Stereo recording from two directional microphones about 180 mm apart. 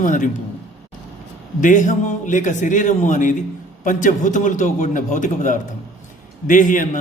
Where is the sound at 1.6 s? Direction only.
45° left (ahead or behind).